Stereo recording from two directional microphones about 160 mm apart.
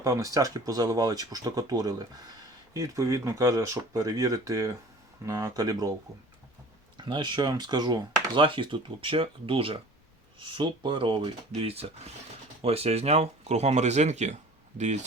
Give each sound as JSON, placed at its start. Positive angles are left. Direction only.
{"t": 0.0, "sound": "speech", "side_deg": -20}
{"t": 6.9, "sound": "speech", "side_deg": -30}